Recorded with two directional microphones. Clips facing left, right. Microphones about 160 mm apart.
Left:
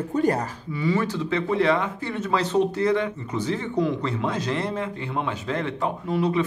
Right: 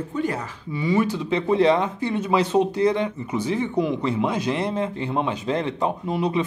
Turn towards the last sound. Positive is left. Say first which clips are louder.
# even
turn(degrees=-20)  # may be behind; listen again after turning